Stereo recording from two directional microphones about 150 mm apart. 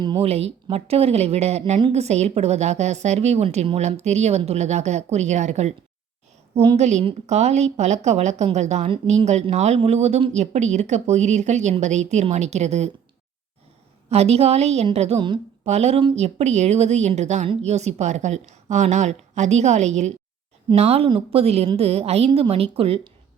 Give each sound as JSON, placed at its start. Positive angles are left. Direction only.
{"t": 0.0, "sound": "speech", "side_deg": -30}
{"t": 0.3, "sound": "a woman's voice", "side_deg": -40}
{"t": 6.5, "sound": "a woman's voice", "side_deg": -35}
{"t": 6.7, "sound": "a woman's voice", "side_deg": -50}
{"t": 14.1, "sound": "a woman's voice", "side_deg": -45}